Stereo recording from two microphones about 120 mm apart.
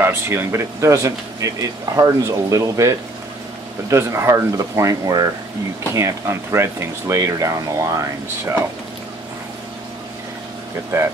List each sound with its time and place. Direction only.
0.0 s speech: 20° right (ahead or behind)